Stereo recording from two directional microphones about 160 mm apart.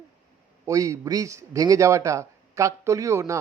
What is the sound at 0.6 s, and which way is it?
A man's voice, 20° right (ahead or behind).